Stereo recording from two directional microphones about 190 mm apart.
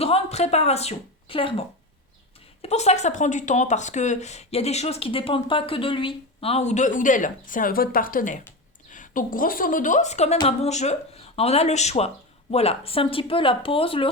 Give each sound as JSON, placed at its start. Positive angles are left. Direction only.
{"t": 0.0, "sound": "speech", "side_deg": 35}
{"t": 10.3, "sound": "speech", "side_deg": 25}
{"t": 10.7, "sound": "speech", "side_deg": 35}